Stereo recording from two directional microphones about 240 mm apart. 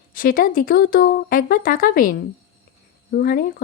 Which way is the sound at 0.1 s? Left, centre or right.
Left.